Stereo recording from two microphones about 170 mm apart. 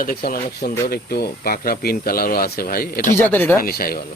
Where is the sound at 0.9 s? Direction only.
65° left (ahead or behind).